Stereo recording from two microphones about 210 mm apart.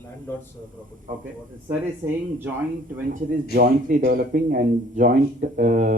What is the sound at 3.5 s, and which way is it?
Speech, 40° right (ahead or behind).